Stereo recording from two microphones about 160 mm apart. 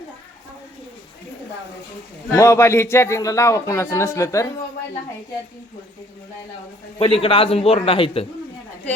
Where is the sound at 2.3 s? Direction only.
20° left (ahead or behind).